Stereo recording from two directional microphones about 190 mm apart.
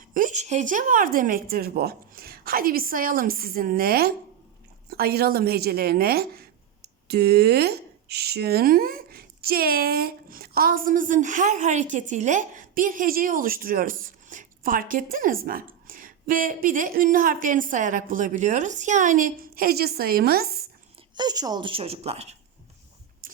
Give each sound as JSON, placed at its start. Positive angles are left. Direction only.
{"t": 0.1, "sound": "speech", "side_deg": -45}
{"t": 21.2, "sound": "a woman's voice", "side_deg": -20}
{"t": 23.2, "sound": "a sound", "side_deg": -50}